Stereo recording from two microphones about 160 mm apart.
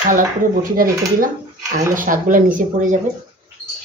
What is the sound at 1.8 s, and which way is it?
Speech, 55° right (ahead or behind).